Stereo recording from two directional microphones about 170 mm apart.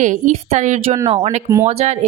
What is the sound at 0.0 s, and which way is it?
A woman's voice, 50° right (ahead or behind).